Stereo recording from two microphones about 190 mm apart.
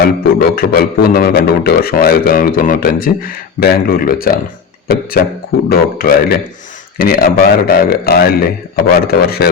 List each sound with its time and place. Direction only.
0.0 s a man's voice: 55° left (ahead or behind)